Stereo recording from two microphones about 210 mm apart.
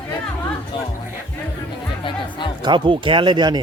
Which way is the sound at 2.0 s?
20° left (ahead or behind).